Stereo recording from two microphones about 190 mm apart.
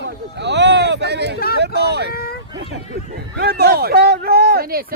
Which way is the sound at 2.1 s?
55° left (ahead or behind).